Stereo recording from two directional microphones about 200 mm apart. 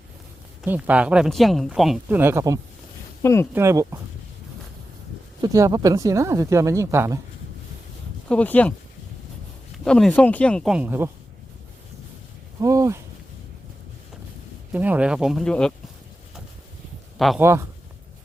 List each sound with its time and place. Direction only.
0.6 s speech: 5° right (ahead or behind)
5.4 s speech: 15° right (ahead or behind)
8.3 s speech: 5° left (ahead or behind)
9.8 s speech: 5° left (ahead or behind)
12.5 s a sound: 15° right (ahead or behind)
14.7 s speech: 5° right (ahead or behind)
17.2 s speech: centre (ahead or behind)
17.4 s speech: 15° right (ahead or behind)